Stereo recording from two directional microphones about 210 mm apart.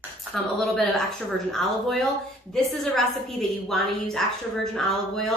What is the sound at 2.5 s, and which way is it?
A woman's voice, centre (ahead or behind).